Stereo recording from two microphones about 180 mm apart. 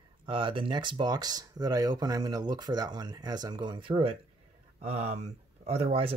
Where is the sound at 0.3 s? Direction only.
25° right (ahead or behind).